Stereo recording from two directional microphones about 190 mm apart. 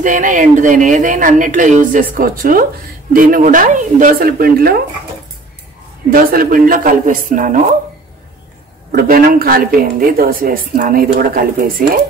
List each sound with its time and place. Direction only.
0.0 s speech: 45° right (ahead or behind)
6.1 s speech: 50° right (ahead or behind)
8.9 s speech: 50° right (ahead or behind)